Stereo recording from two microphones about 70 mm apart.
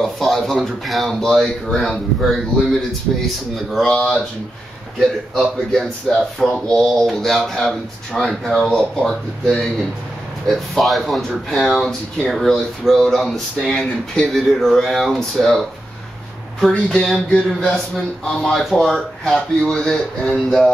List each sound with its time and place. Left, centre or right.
0.0 s speech: centre
3.9 s speech: centre
5.3 s speech: centre
8.3 s speech: centre
16.6 s speech: centre
18.5 s speech: centre